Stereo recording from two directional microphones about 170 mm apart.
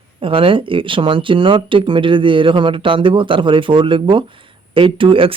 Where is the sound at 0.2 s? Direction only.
30° right (ahead or behind).